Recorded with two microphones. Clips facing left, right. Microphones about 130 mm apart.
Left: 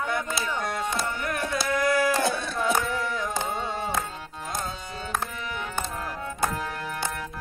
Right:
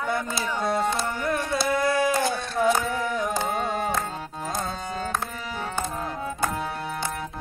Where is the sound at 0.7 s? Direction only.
25° right (ahead or behind).